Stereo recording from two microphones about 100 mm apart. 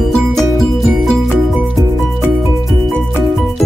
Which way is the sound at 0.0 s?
Centre (ahead or behind).